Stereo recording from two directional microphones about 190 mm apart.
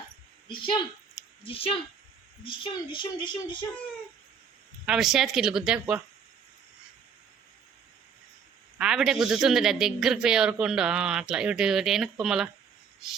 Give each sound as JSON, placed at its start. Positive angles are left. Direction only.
{"t": 0.4, "sound": "a woman's voice", "side_deg": 25}
{"t": 4.9, "sound": "speech", "side_deg": 0}
{"t": 8.8, "sound": "speech", "side_deg": -5}